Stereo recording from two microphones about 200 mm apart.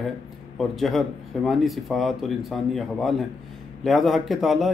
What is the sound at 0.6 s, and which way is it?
Speech, centre (ahead or behind).